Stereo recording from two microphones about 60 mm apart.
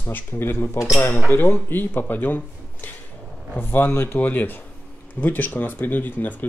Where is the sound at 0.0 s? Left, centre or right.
Left.